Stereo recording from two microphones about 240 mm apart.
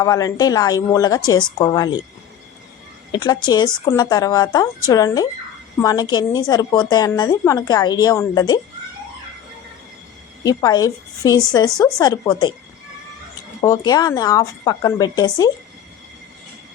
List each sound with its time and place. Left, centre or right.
0.0 s a woman's voice: centre
3.1 s a woman's voice: centre
10.4 s a woman's voice: centre
13.6 s a woman's voice: centre